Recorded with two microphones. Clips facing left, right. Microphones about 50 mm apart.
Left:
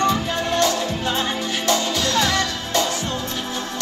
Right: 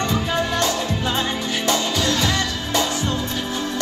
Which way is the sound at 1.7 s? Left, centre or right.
Right.